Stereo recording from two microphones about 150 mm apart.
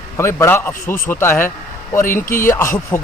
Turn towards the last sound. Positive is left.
turn(degrees=20)  # may be behind; listen again after turning